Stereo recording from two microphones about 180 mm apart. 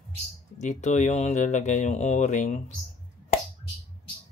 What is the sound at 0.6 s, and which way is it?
Speech, 45° left (ahead or behind).